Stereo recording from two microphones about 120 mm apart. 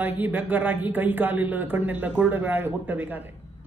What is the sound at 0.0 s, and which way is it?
A man's voice, 15° right (ahead or behind).